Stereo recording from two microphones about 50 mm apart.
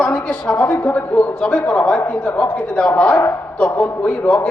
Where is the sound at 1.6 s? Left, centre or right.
Left.